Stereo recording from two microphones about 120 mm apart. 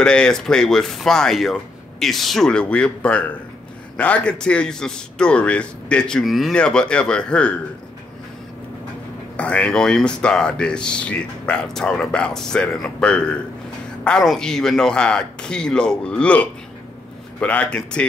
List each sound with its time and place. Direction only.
0.0 s speech: 5° left (ahead or behind)
9.4 s speech: 10° left (ahead or behind)